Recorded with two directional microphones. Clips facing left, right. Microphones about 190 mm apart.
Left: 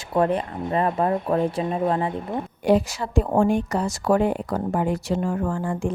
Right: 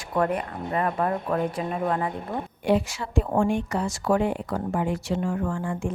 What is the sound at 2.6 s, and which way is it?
A woman's voice, 40° left (ahead or behind).